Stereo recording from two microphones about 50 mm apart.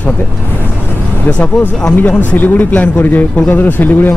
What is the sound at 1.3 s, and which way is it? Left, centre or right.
Speech, left.